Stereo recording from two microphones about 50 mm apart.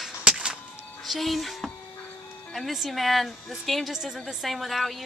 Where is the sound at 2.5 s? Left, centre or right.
Centre.